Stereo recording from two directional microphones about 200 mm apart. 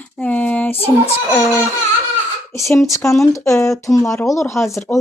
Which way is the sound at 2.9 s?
15° left (ahead or behind).